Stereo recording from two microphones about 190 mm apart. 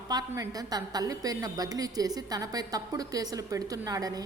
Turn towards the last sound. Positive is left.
turn(degrees=-20)  # may be behind; listen again after turning